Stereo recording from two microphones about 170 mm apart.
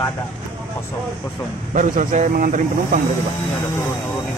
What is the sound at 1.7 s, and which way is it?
Speech, 50° right (ahead or behind).